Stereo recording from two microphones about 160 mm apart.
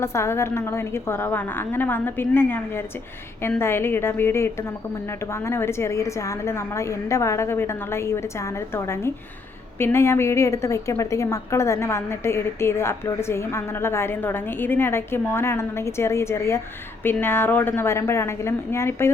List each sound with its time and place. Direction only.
0.0 s a woman's voice: 15° left (ahead or behind)